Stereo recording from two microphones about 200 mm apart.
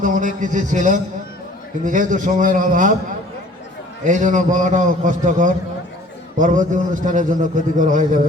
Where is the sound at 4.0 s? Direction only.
40° right (ahead or behind).